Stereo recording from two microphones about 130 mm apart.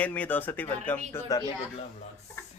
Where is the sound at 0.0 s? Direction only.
10° left (ahead or behind).